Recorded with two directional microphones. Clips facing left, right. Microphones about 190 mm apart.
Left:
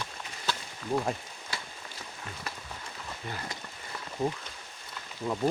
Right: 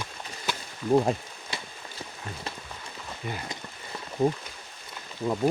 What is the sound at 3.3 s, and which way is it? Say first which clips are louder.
Speech: right 4 dB; 15° right (ahead or behind).